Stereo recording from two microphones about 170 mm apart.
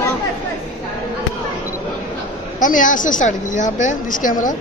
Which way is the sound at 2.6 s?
50° left (ahead or behind).